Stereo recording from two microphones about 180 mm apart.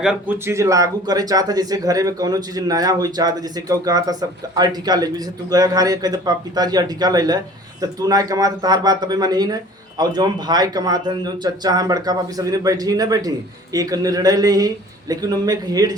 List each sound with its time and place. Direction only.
0.0 s speech: 5° right (ahead or behind)